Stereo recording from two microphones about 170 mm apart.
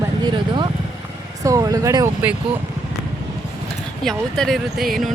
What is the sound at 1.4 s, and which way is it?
Speech, 20° right (ahead or behind).